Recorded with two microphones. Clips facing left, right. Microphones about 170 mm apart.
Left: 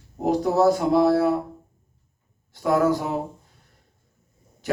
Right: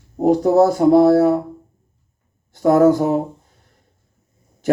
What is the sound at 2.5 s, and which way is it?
Speech, 45° right (ahead or behind).